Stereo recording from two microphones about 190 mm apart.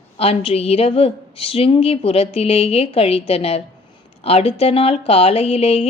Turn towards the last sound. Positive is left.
turn(degrees=30)  # may be behind; listen again after turning